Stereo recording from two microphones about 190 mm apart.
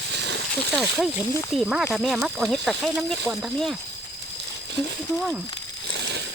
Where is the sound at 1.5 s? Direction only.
Centre (ahead or behind).